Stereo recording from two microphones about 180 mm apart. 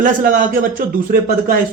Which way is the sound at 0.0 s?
50° right (ahead or behind).